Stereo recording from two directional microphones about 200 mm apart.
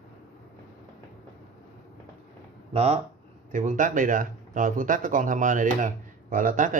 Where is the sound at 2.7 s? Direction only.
35° right (ahead or behind).